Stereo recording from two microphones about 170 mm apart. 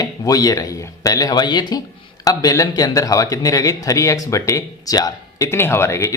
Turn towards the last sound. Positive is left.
turn(degrees=15)  # may be behind; listen again after turning